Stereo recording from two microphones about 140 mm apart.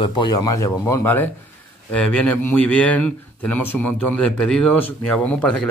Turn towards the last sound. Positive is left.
turn(degrees=5)  # may be behind; listen again after turning